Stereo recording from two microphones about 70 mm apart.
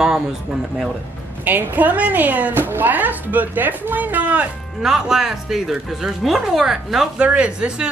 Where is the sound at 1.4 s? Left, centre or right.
Right.